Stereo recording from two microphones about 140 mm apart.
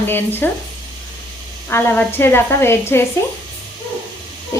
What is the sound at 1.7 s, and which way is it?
A woman's voice, 15° left (ahead or behind).